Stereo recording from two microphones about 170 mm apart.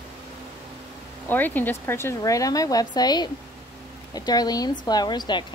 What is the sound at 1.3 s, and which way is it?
A woman's voice, 10° left (ahead or behind).